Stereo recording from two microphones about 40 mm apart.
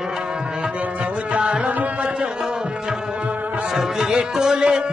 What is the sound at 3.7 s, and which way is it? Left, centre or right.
Music, centre.